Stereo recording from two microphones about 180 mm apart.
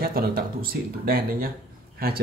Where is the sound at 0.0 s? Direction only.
55° right (ahead or behind).